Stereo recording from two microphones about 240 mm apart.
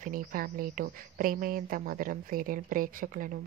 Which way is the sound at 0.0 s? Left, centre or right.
Right.